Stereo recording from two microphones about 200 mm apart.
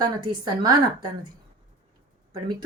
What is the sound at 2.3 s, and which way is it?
Speech, 20° right (ahead or behind).